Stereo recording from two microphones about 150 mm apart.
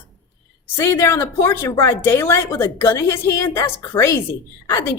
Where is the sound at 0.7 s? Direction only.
20° left (ahead or behind).